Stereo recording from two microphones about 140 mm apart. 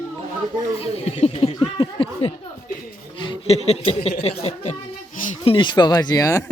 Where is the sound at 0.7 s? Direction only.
45° left (ahead or behind).